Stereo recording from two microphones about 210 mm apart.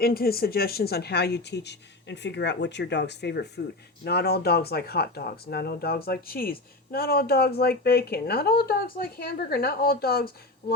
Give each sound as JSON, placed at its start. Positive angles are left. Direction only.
{"t": 0.0, "sound": "speech", "side_deg": 45}